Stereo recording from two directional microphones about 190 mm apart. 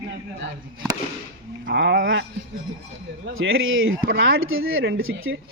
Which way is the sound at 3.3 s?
90° right.